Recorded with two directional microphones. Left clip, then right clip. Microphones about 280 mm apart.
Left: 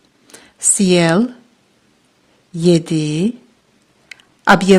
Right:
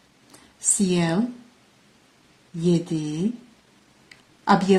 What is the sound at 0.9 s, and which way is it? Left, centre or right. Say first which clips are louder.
Speech: left 13 dB; left.